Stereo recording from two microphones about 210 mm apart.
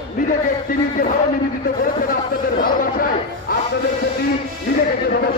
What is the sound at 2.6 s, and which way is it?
Chatter, 45° left (ahead or behind).